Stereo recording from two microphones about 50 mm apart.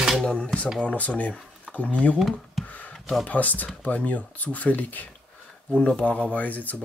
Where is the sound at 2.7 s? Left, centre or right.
Left.